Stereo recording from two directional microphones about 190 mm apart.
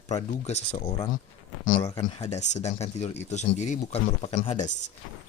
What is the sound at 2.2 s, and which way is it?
Speech, 35° left (ahead or behind).